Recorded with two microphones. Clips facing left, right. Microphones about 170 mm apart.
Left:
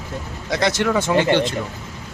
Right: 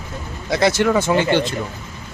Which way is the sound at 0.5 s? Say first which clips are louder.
Right 3 dB; 5° right (ahead or behind).